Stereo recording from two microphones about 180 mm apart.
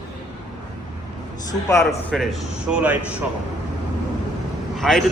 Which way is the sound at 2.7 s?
10° right (ahead or behind).